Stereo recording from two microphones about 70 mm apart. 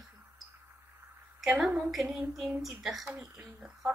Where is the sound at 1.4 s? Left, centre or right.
Centre.